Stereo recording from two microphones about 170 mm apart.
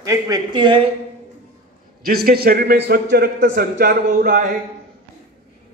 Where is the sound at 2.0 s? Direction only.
60° right (ahead or behind).